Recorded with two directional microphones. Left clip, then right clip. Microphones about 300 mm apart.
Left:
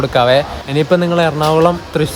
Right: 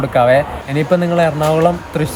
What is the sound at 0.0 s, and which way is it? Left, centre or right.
Speech, centre.